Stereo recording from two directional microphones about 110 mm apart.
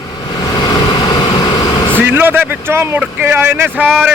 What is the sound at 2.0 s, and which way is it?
Speech, 20° right (ahead or behind).